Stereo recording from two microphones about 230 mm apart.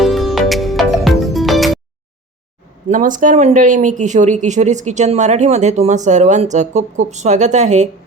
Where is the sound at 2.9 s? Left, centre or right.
Right.